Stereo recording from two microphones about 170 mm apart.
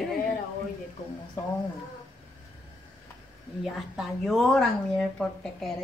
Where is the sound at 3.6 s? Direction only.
Centre (ahead or behind).